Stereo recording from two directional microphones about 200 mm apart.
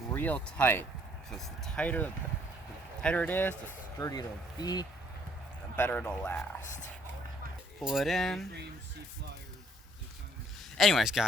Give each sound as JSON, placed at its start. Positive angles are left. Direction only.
{"t": 0.1, "sound": "speech", "side_deg": 10}
{"t": 5.7, "sound": "speech", "side_deg": 10}
{"t": 7.8, "sound": "speech", "side_deg": 0}
{"t": 10.8, "sound": "speech", "side_deg": 0}